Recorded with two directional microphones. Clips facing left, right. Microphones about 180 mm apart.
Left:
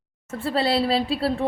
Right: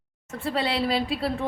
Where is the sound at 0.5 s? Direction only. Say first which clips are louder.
Left 4 dB; 35° left (ahead or behind).